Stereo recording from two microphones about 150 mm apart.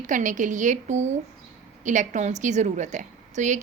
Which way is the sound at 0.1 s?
60° right (ahead or behind).